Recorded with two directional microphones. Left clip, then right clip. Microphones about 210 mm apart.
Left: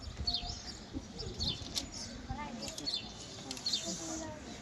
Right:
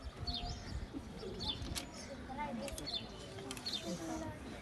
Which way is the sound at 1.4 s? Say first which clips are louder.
Left 4 dB; 40° left (ahead or behind).